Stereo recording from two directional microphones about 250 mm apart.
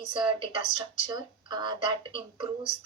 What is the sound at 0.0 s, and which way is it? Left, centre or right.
Speech, centre.